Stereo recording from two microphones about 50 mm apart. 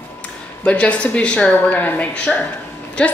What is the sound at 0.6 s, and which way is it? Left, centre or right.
Speech, left.